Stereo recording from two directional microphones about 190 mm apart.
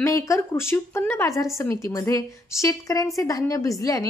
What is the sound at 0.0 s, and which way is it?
A woman's voice, 15° left (ahead or behind).